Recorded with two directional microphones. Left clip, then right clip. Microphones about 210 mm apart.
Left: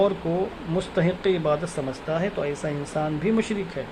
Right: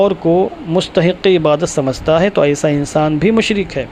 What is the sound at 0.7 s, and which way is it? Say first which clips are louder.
Speech: right 11 dB; 30° right (ahead or behind).